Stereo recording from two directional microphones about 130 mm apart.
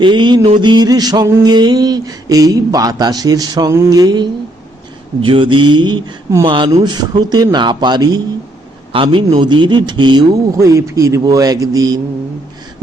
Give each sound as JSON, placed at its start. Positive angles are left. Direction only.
{"t": 0.0, "sound": "speech", "side_deg": -35}
{"t": 5.2, "sound": "speech", "side_deg": -40}
{"t": 10.6, "sound": "speech", "side_deg": -25}